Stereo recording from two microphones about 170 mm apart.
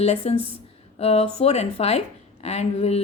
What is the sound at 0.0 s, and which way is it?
A woman's voice, 35° left (ahead or behind).